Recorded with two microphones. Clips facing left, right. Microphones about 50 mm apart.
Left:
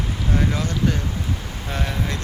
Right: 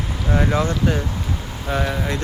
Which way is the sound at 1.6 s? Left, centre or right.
Centre.